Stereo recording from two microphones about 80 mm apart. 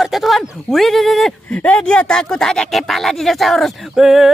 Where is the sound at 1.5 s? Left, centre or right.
Centre.